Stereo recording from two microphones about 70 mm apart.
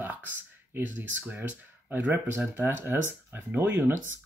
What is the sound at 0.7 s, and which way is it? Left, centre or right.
Speech, right.